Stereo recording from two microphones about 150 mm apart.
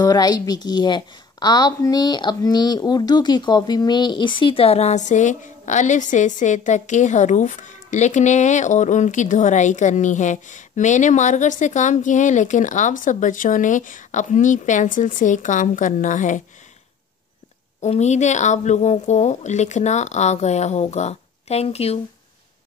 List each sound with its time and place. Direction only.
0.0 s a woman's voice: 25° left (ahead or behind); by 16.4 s 55° left (ahead or behind)
17.7 s a woman's voice: 50° left (ahead or behind)